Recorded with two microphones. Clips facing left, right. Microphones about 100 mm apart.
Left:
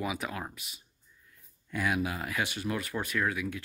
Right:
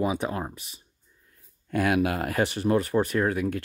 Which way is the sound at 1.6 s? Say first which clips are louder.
Right 7 dB; 60° right (ahead or behind).